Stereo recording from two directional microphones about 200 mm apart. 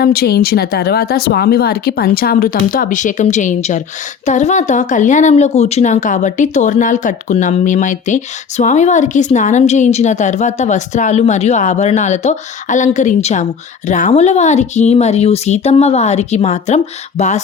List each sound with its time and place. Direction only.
0.0 s a woman's voice: 50° left (ahead or behind); by 17.4 s 35° left (ahead or behind)